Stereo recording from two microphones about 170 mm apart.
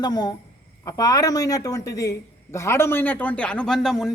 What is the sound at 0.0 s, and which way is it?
A man's voice, 25° left (ahead or behind).